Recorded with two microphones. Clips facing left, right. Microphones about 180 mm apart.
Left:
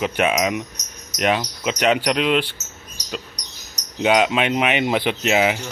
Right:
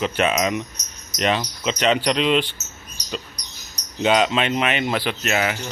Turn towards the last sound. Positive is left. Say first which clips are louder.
# left 4 dB
turn(degrees=15)  # may be behind; listen again after turning